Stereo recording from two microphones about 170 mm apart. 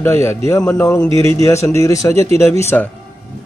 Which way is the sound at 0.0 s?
15° left (ahead or behind).